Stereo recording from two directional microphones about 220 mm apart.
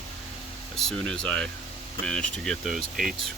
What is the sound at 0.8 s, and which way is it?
Speech, centre (ahead or behind).